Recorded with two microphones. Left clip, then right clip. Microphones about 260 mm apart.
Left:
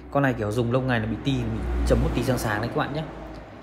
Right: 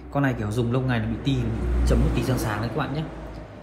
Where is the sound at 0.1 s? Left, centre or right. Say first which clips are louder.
Left 2 dB; left.